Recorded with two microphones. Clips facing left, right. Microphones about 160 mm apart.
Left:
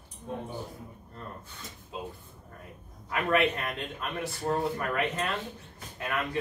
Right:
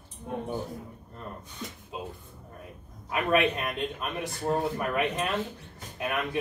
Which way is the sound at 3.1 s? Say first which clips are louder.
Right 1 dB; 15° right (ahead or behind).